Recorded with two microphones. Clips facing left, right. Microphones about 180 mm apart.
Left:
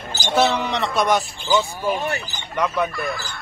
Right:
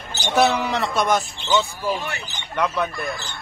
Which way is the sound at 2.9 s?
25° right (ahead or behind).